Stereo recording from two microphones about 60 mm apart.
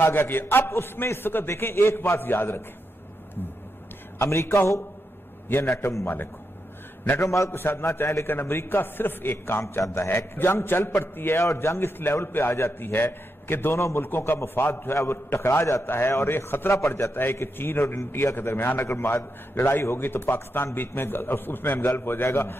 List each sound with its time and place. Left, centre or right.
0.0 s a man's voice: left
4.2 s a man's voice: left
7.2 s a man's voice: left
7.5 s a man's voice: left
8.3 s a man's voice: left
13.7 s a man's voice: left
14.0 s a man's voice: left